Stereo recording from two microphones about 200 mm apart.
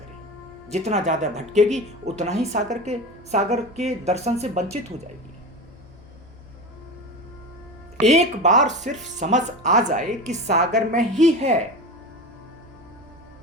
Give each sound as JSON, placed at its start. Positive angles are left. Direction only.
{"t": 0.7, "sound": "speech", "side_deg": -35}
{"t": 8.0, "sound": "speech", "side_deg": -35}